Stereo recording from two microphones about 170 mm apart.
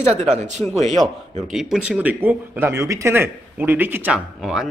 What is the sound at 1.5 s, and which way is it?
Speech, centre (ahead or behind).